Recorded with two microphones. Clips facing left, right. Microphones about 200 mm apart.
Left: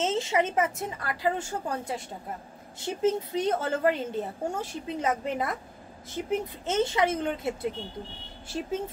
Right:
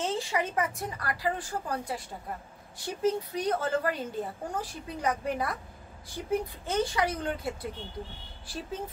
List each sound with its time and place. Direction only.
0.0 s speech: 20° left (ahead or behind)